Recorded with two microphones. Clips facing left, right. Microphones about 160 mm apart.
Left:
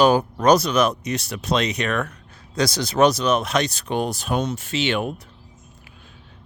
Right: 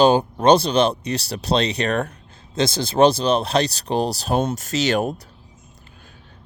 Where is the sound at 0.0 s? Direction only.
30° right (ahead or behind).